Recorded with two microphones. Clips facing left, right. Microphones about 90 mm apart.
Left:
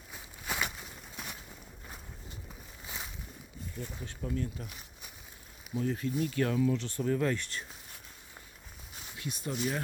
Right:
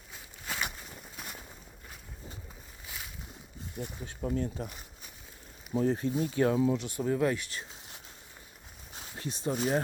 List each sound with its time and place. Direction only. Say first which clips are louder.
0.1 s a sound: left 2 dB; 15° left (ahead or behind)
2.8 s boat: left 2 dB; 25° left (ahead or behind)
3.8 s speech: right 1 dB; 15° right (ahead or behind)
4.2 s speech: right 4 dB; 30° right (ahead or behind)
5.7 s speech: right 4 dB; 30° right (ahead or behind); by 7.6 s 5° right (ahead or behind)
9.0 s a sound: right 2 dB; 35° right (ahead or behind)
9.5 s speech: right 5 dB; 35° right (ahead or behind)